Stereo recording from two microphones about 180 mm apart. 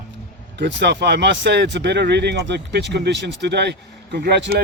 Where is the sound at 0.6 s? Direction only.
70° right (ahead or behind).